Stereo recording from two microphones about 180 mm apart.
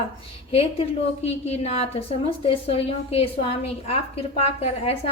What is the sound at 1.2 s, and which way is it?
A woman's voice, 35° left (ahead or behind).